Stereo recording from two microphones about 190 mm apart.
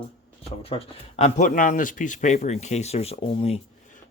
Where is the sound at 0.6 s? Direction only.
35° left (ahead or behind).